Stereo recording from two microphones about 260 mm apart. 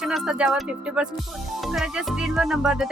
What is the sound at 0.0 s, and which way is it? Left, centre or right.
Music, centre.